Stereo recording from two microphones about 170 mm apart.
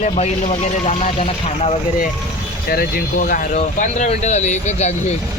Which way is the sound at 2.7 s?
60° left (ahead or behind).